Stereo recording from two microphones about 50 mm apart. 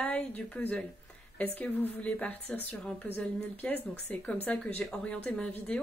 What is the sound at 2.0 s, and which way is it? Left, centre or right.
Speech, left.